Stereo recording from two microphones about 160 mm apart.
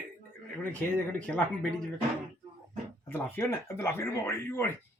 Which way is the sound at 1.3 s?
10° left (ahead or behind).